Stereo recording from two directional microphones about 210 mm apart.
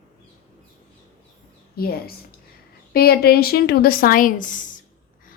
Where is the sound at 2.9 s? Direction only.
45° left (ahead or behind).